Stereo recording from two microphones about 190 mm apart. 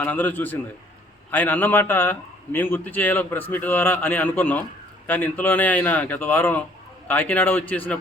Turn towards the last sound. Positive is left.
turn(degrees=10)  # may be behind; listen again after turning